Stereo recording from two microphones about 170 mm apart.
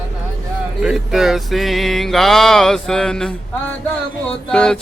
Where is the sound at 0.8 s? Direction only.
5° right (ahead or behind).